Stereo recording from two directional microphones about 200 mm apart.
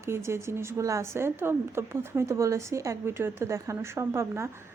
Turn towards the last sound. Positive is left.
turn(degrees=-15)  # may be behind; listen again after turning